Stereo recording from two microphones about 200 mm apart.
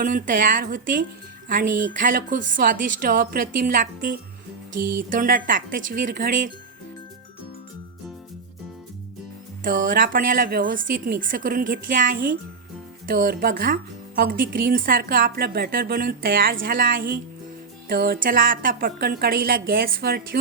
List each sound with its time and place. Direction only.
0.0 s a woman's voice: 40° right (ahead or behind)
9.6 s a woman's voice: 45° right (ahead or behind)